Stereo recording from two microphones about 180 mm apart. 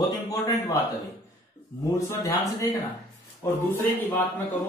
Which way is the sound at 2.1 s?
15° left (ahead or behind).